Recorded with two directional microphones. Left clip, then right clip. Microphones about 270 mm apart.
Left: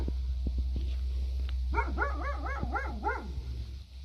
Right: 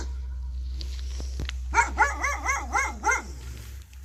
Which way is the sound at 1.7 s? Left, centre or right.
Left.